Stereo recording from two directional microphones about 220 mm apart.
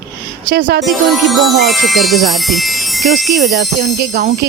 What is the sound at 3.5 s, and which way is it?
Speech, 50° right (ahead or behind).